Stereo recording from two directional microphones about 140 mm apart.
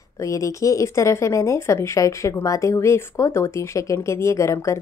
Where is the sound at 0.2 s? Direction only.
25° left (ahead or behind).